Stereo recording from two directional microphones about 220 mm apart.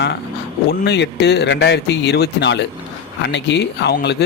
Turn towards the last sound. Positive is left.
turn(degrees=50)  # may be behind; listen again after turning